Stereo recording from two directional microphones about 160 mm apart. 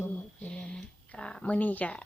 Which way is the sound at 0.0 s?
10° left (ahead or behind).